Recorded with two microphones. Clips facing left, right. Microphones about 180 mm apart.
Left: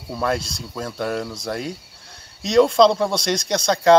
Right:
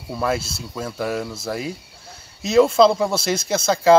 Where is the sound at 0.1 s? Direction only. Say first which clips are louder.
Even; 5° right (ahead or behind).